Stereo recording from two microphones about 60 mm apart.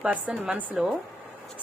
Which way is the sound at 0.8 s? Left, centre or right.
Centre.